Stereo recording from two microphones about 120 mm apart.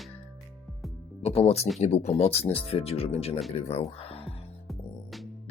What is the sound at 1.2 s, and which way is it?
Speech, 60° left (ahead or behind).